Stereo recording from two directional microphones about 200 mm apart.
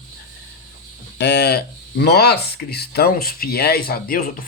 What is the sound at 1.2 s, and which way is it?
Speech, 55° left (ahead or behind).